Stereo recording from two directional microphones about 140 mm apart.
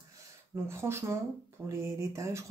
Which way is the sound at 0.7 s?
20° right (ahead or behind).